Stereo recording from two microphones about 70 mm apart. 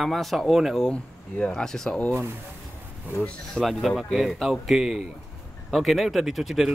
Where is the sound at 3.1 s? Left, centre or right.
Right.